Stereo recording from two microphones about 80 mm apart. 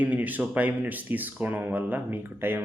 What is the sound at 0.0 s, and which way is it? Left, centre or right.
Speech, centre.